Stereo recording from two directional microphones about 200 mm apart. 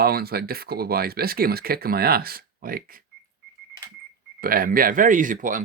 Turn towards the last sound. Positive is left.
turn(degrees=-40)  # may be behind; listen again after turning